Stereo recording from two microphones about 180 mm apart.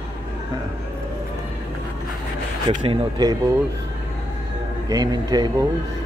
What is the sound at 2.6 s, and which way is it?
Speech, 25° right (ahead or behind).